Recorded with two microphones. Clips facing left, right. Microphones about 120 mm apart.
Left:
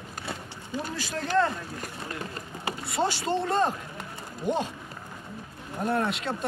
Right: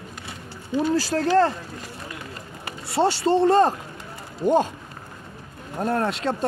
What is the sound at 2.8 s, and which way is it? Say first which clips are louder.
Speech: right 8 dB; 30° right (ahead or behind).